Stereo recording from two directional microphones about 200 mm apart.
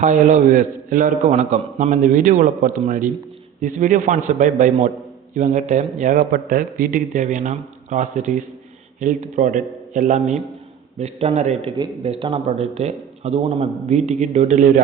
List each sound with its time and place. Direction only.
0.0 s a man's voice: 40° right (ahead or behind)